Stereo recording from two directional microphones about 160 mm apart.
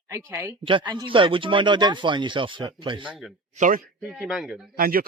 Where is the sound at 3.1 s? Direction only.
Centre (ahead or behind).